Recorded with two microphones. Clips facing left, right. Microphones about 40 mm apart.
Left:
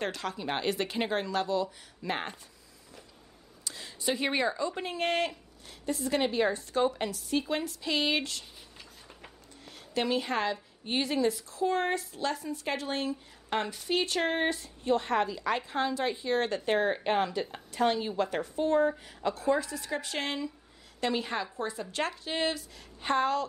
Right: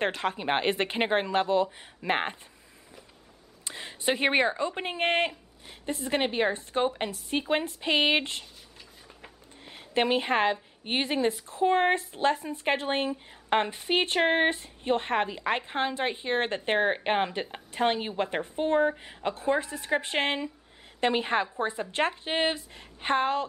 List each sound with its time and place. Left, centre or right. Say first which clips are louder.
0.0 s a woman's voice: right 5 dB; right
3.6 s a woman's voice: right 4 dB; right
9.6 s a woman's voice: right 5 dB; right